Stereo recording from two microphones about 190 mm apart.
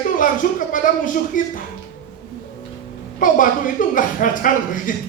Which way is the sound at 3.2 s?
45° left (ahead or behind).